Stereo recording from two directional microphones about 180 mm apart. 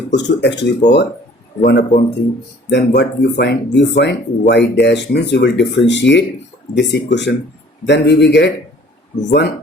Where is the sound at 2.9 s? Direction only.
70° left (ahead or behind).